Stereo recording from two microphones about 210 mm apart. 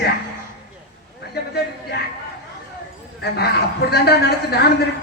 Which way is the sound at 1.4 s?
50° left (ahead or behind).